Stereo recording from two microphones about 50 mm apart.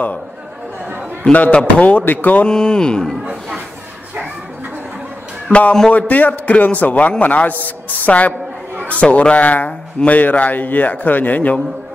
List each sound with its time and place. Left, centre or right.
1.3 s a man's voice: left
2.4 s speech: centre
5.5 s a man's voice: left
9.7 s speech: left
10.1 s a man's voice: left